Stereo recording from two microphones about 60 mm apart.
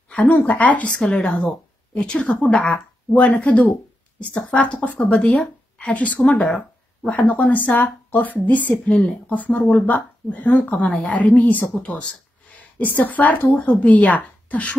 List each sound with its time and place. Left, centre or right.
0.2 s speech: left